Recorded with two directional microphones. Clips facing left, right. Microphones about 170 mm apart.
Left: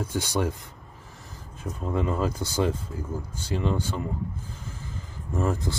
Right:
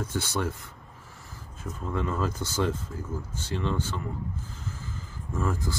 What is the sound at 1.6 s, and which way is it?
Speech, 15° left (ahead or behind).